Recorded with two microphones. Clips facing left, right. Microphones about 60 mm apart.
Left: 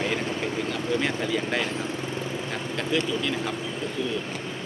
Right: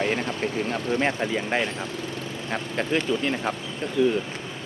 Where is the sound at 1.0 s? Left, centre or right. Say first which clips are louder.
Right 2 dB; right.